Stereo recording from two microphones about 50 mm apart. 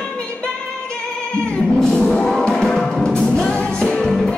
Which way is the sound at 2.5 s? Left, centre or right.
Centre.